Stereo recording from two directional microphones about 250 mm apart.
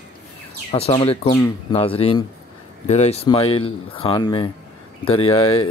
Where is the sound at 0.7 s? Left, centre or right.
Left.